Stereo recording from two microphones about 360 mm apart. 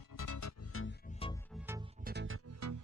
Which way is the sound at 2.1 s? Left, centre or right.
Right.